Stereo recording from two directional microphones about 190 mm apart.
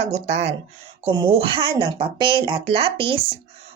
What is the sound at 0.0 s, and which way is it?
A woman's voice, 35° right (ahead or behind).